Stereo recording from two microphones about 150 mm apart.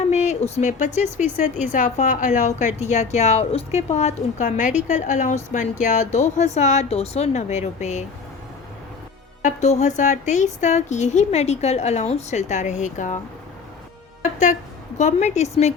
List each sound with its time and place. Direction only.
0.0 s a sound: 50° left (ahead or behind)
1.7 s a woman's voice: 55° left (ahead or behind)
9.4 s a woman's voice: 50° left (ahead or behind)
14.2 s music: 55° left (ahead or behind)
14.9 s a woman's voice: 50° left (ahead or behind)